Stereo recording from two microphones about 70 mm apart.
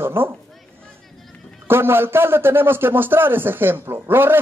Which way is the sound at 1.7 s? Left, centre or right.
Right.